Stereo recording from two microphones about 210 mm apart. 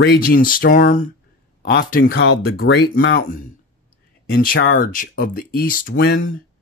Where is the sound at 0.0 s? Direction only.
45° left (ahead or behind).